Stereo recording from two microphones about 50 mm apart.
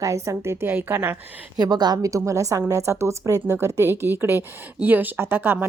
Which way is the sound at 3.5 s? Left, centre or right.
Right.